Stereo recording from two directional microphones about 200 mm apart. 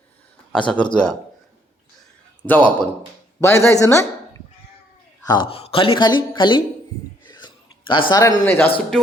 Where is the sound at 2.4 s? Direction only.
5° left (ahead or behind).